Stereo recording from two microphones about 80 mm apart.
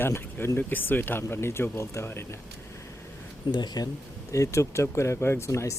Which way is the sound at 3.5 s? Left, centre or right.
Left.